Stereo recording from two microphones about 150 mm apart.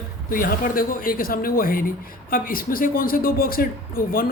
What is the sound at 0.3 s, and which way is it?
Speech, 70° left (ahead or behind).